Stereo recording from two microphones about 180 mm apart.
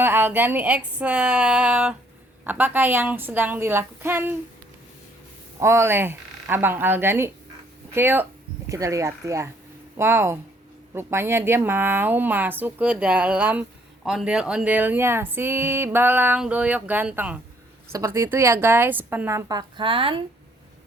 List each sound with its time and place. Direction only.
0.0 s speech: 10° right (ahead or behind)
5.5 s speech: 15° right (ahead or behind)